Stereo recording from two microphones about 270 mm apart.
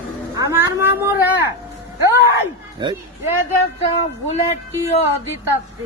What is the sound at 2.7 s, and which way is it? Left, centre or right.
Speech, centre.